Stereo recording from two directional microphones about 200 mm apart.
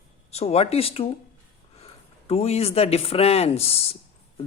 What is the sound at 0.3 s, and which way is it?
Speech, 30° left (ahead or behind).